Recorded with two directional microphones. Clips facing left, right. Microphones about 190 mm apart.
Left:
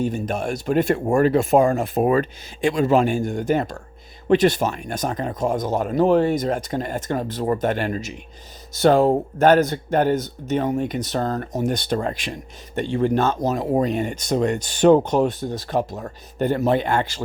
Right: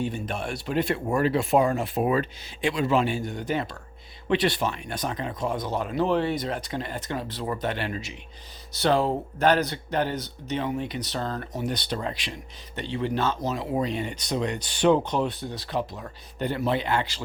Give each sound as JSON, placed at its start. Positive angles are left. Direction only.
{"t": 0.0, "sound": "speech", "side_deg": 45}